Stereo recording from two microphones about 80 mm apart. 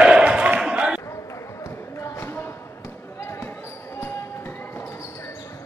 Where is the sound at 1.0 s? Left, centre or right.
Left.